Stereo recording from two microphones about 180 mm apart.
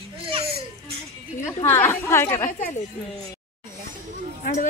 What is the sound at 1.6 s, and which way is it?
Speech, 10° left (ahead or behind).